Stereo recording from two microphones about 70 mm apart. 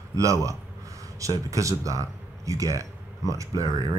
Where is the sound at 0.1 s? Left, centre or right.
Right.